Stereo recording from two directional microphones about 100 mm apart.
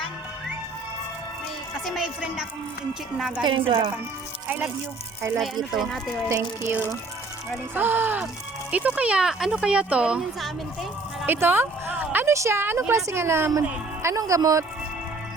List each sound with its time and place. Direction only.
1.8 s a woman's voice: 5° right (ahead or behind)
3.4 s a woman's voice: 55° right (ahead or behind)
4.4 s speech: 15° right (ahead or behind)
5.7 s a woman's voice: 5° left (ahead or behind)
6.6 s speech: 20° right (ahead or behind)
11.3 s speech: 20° right (ahead or behind)